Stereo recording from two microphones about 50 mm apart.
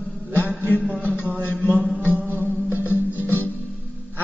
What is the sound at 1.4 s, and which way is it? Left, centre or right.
Mantra, left.